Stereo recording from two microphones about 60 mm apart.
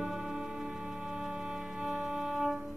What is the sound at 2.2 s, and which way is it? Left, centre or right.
Music, centre.